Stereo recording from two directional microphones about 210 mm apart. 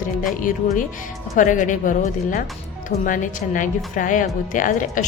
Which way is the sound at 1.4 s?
35° left (ahead or behind).